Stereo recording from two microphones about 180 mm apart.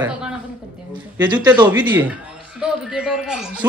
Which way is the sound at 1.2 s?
10° right (ahead or behind).